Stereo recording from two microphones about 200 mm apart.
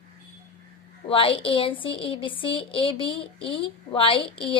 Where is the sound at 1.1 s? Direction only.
25° left (ahead or behind).